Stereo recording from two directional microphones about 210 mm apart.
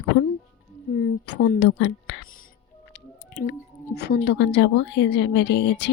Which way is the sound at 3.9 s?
50° left (ahead or behind).